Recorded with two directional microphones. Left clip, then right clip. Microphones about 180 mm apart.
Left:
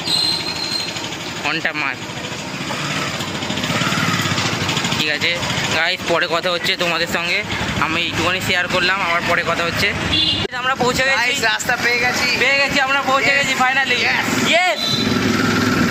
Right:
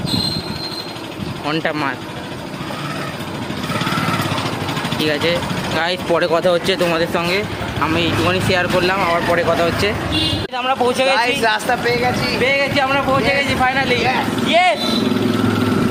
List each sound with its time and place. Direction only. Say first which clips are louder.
1.5 s speech: right 1 dB; 20° right (ahead or behind)
5.0 s speech: right 1 dB; 20° right (ahead or behind)
7.8 s speech: right 3 dB; centre (ahead or behind); by 9.9 s 20° right (ahead or behind)
10.6 s speech: right 3 dB; 5° left (ahead or behind)
11.2 s speech: right 1 dB; 35° right (ahead or behind)
11.7 s speech: even; 20° right (ahead or behind)
12.4 s speech: right 1 dB; 5° left (ahead or behind)